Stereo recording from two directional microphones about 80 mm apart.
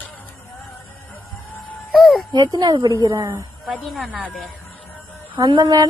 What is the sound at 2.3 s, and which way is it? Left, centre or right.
Speech, right.